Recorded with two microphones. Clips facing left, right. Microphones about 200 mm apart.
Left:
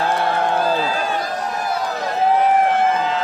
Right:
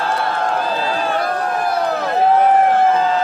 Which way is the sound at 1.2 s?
60° right (ahead or behind).